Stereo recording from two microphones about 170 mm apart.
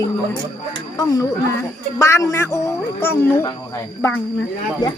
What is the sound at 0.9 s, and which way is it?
Speech, 20° left (ahead or behind).